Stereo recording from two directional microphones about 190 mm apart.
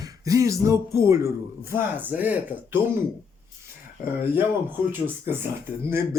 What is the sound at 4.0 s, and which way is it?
Speech, 10° right (ahead or behind).